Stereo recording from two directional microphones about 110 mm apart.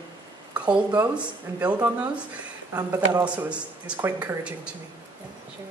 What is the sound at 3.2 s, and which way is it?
Speech, 10° right (ahead or behind).